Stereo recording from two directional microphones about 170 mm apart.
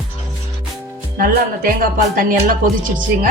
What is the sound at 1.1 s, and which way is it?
Speech, 55° right (ahead or behind).